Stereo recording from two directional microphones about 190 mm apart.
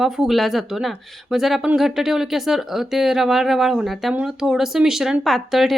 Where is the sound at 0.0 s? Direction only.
Centre (ahead or behind).